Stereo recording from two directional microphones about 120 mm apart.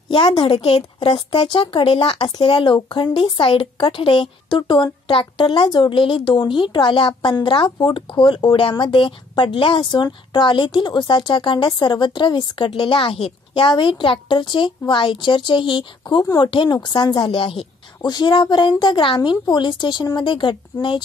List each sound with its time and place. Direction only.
0.1 s speech: 50° left (ahead or behind)
2.1 s speech: 40° left (ahead or behind)
17.3 s speech: 50° left (ahead or behind)